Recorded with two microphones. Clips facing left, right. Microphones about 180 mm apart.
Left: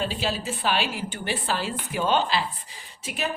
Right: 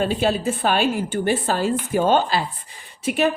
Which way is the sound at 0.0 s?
55° right (ahead or behind).